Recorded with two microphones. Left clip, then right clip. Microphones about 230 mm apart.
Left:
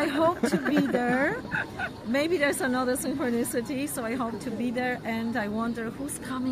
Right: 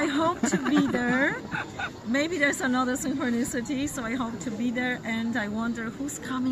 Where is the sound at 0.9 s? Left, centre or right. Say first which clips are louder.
Even; centre.